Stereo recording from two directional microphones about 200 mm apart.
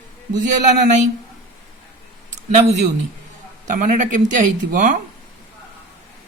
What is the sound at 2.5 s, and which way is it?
A woman's voice, 35° right (ahead or behind).